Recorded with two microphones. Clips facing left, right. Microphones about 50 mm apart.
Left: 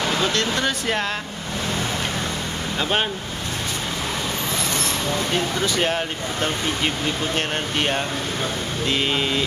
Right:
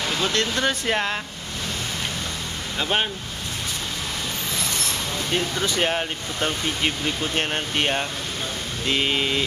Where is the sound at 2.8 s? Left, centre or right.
Centre.